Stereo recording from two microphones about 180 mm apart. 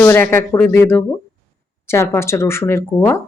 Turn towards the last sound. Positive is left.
turn(degrees=15)  # may be behind; listen again after turning